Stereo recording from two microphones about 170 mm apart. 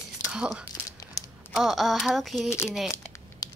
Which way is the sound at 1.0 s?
20° left (ahead or behind).